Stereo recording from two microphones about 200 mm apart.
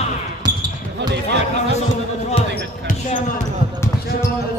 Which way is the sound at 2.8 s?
40° left (ahead or behind).